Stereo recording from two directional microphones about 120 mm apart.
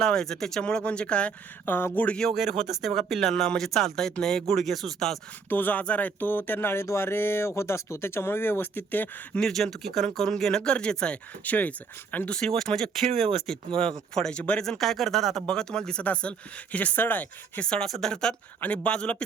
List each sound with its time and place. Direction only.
0.0 s speech: 5° left (ahead or behind)
5.5 s speech: 15° left (ahead or behind)
9.4 s speech: 5° left (ahead or behind)
14.1 s speech: 5° left (ahead or behind)